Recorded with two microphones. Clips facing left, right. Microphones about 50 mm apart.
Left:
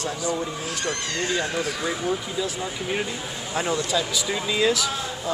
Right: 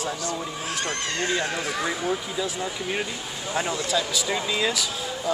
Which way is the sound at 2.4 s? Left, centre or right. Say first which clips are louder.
Even; centre.